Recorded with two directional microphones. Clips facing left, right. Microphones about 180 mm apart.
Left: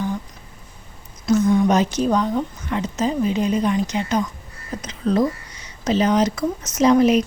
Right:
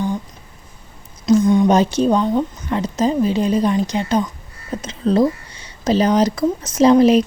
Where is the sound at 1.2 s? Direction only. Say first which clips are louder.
Right 3 dB; 20° right (ahead or behind).